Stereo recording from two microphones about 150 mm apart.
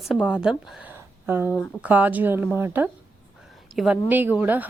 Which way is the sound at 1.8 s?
10° right (ahead or behind).